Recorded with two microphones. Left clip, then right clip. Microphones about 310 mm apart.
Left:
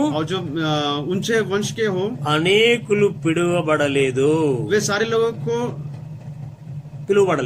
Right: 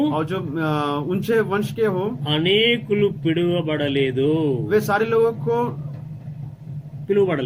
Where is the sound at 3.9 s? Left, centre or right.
Centre.